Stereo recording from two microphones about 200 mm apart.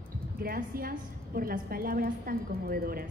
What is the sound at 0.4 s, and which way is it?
A man's voice, 50° right (ahead or behind).